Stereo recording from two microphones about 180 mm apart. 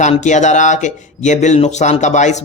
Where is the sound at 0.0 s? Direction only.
40° left (ahead or behind).